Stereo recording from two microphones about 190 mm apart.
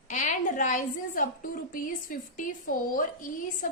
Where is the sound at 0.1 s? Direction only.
40° left (ahead or behind).